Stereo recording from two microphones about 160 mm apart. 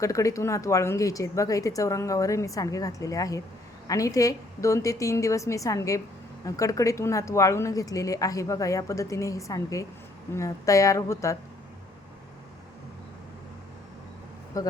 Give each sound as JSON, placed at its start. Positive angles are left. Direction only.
{"t": 0.0, "sound": "speech", "side_deg": 20}
{"t": 14.5, "sound": "speech", "side_deg": 20}